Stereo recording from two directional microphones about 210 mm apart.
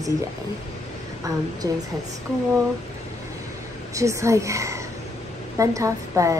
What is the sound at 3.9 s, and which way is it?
Speech, 15° right (ahead or behind).